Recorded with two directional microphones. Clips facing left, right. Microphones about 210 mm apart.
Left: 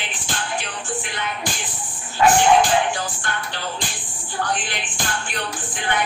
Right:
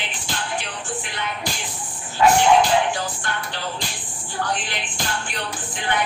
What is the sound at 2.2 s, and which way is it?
Music, 50° left (ahead or behind).